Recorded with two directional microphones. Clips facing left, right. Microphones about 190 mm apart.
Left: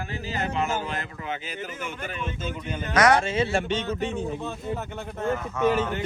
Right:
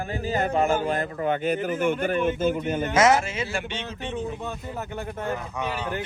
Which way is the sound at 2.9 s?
25° right (ahead or behind).